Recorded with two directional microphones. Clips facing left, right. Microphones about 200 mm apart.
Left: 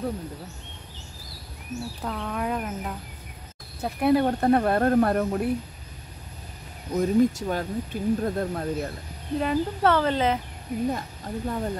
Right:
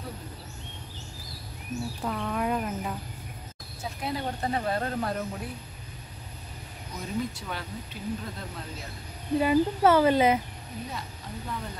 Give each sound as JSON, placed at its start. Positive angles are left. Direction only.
{"t": 1.7, "sound": "speech", "side_deg": 5}
{"t": 3.8, "sound": "speech", "side_deg": 60}
{"t": 6.9, "sound": "speech", "side_deg": 45}
{"t": 9.4, "sound": "speech", "side_deg": -5}
{"t": 10.9, "sound": "speech", "side_deg": 45}